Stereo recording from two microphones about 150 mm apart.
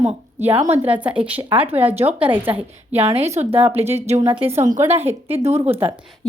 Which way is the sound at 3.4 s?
15° right (ahead or behind).